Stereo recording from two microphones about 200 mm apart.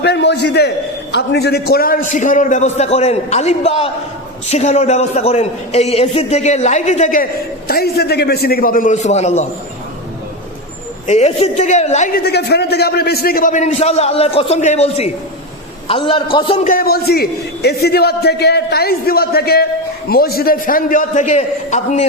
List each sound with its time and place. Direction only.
0.0 s a man's voice: 55° left (ahead or behind); by 7.3 s 40° left (ahead or behind)
7.7 s a man's voice: 50° left (ahead or behind); by 9.5 s 35° left (ahead or behind)
11.0 s a man's voice: 35° left (ahead or behind)
12.2 s a man's voice: 55° left (ahead or behind); by 16.6 s 25° left (ahead or behind)
16.6 s a man's voice: 50° left (ahead or behind)